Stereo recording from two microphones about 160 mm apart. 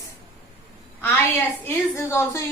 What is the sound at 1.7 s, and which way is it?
Speech, 15° left (ahead or behind).